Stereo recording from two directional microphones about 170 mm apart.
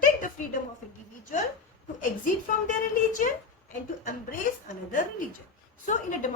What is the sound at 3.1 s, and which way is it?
A woman's voice, 50° left (ahead or behind).